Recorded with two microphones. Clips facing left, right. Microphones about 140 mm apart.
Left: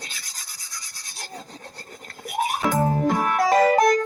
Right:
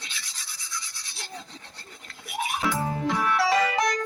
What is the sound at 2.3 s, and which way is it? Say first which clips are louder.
Music: left 4 dB; 45° left (ahead or behind).